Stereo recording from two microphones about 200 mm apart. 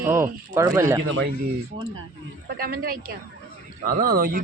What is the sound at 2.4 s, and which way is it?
A man's voice, 50° right (ahead or behind).